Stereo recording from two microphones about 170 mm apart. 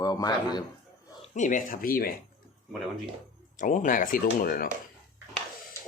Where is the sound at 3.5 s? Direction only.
50° left (ahead or behind).